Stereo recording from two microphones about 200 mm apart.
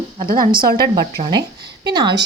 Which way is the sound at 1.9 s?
20° right (ahead or behind).